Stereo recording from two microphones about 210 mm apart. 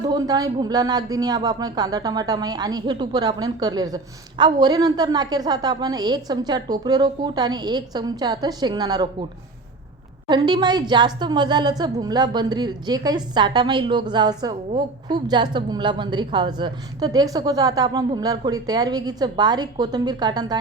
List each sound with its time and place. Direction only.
0.0 s speech: 20° right (ahead or behind)
10.2 s speech: 20° right (ahead or behind)